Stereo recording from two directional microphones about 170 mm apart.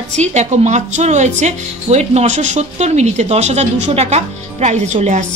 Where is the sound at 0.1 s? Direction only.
45° right (ahead or behind).